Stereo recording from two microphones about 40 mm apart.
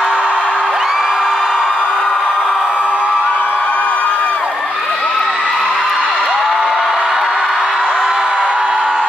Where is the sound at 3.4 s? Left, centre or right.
Left.